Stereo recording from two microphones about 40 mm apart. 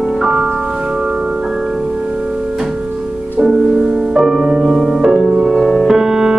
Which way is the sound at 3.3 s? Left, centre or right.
Right.